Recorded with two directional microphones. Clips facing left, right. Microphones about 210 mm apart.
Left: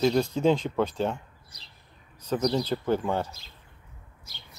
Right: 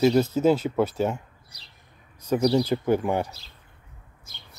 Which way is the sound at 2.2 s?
10° right (ahead or behind).